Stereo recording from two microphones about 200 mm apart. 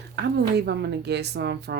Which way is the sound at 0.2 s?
55° right (ahead or behind).